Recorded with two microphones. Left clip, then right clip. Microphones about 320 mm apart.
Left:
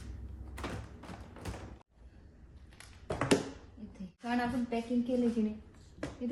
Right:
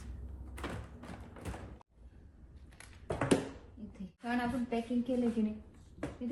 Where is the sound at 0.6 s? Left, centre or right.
Centre.